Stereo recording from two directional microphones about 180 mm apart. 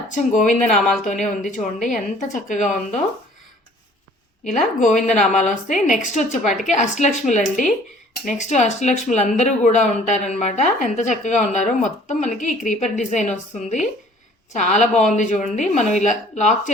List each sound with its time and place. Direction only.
0.1 s speech: 45° left (ahead or behind)
4.5 s a woman's voice: 45° left (ahead or behind)